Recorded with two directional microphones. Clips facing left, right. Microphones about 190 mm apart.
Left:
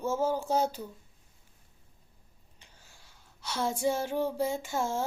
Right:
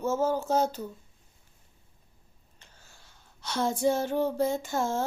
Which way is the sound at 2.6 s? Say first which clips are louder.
Right 2 dB; 15° left (ahead or behind).